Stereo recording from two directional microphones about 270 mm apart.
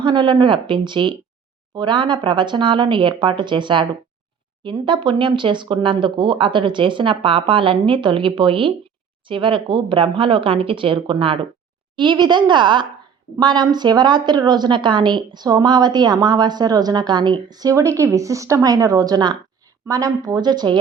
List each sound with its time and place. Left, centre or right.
0.0 s a woman's voice: centre